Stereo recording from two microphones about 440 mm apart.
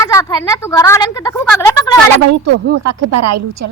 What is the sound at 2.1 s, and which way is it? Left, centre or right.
Speech, right.